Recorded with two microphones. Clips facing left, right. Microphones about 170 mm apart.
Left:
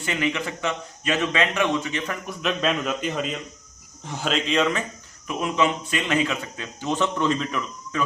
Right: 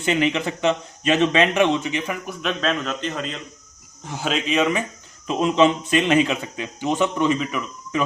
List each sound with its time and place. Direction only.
0.0 s a man's voice: 25° right (ahead or behind)
2.4 s a man's voice: 5° left (ahead or behind)
5.3 s a man's voice: 25° right (ahead or behind)